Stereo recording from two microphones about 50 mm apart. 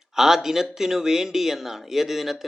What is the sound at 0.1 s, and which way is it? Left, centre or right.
A man's voice, centre.